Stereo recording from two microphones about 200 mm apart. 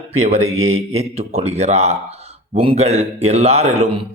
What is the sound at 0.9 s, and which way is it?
A man's voice, 30° right (ahead or behind).